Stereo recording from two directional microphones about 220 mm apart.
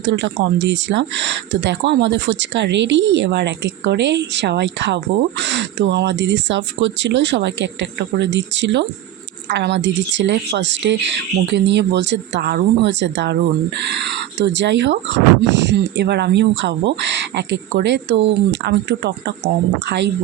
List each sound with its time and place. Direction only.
0.0 s speech: 55° right (ahead or behind)